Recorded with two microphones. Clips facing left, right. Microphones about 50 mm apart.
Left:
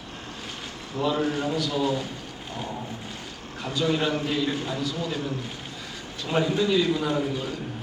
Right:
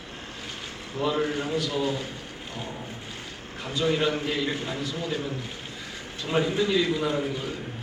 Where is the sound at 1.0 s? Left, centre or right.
Right.